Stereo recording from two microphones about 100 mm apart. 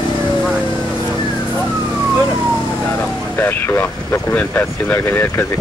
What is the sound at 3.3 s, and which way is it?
Speech, 20° left (ahead or behind).